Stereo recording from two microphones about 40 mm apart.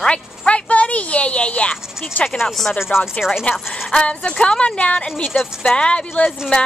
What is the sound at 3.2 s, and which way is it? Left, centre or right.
Speech, centre.